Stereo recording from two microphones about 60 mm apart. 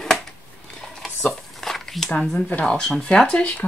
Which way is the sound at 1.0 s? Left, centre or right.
Centre.